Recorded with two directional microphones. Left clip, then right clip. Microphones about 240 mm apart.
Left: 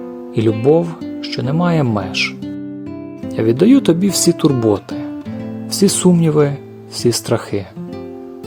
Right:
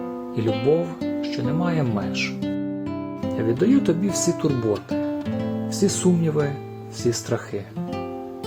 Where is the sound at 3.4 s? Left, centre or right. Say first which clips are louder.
Left 9 dB; left.